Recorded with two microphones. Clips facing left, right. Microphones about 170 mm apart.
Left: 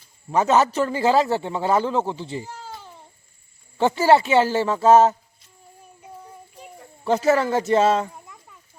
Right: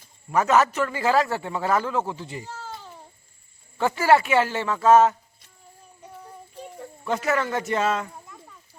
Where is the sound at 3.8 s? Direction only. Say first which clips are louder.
Left 3 dB; 30° left (ahead or behind).